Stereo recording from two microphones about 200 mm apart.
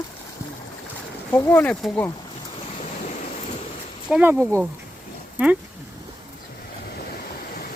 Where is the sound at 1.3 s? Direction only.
10° left (ahead or behind).